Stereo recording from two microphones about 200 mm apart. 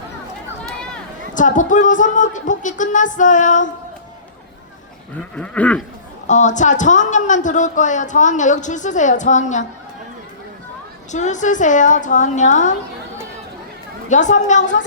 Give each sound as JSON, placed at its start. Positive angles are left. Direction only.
{"t": 1.3, "sound": "a woman's voice", "side_deg": 40}
{"t": 5.4, "sound": "goat", "side_deg": 5}
{"t": 6.2, "sound": "a woman's voice", "side_deg": 35}
{"t": 11.1, "sound": "a woman's voice", "side_deg": 35}
{"t": 14.1, "sound": "a woman's voice", "side_deg": 40}